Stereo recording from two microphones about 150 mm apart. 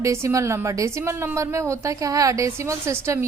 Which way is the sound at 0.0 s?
20° right (ahead or behind).